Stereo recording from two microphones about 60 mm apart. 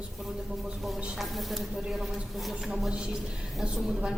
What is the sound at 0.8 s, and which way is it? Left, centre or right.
Speech, centre.